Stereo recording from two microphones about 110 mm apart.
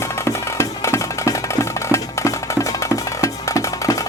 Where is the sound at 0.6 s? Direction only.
25° left (ahead or behind).